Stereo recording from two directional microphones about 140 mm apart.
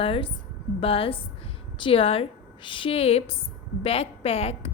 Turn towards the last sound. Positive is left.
turn(degrees=45)  # may be behind; listen again after turning